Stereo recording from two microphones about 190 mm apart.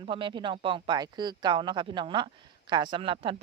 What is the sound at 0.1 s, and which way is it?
Speech, 25° right (ahead or behind).